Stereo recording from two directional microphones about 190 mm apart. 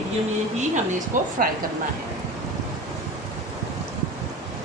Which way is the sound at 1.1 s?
40° right (ahead or behind).